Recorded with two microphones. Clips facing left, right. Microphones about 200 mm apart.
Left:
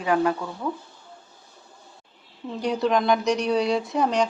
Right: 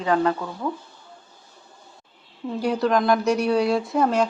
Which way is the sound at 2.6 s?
Centre (ahead or behind).